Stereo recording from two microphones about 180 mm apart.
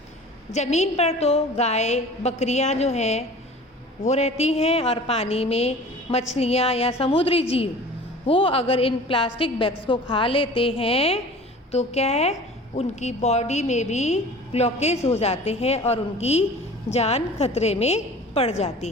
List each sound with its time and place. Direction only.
0.5 s a woman's voice: 40° left (ahead or behind)